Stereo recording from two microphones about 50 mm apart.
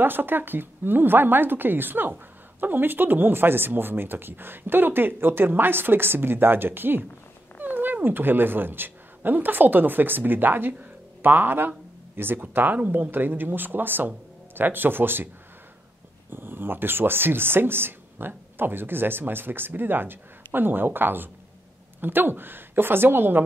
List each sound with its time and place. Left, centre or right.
0.0 s speech: right
16.3 s speech: right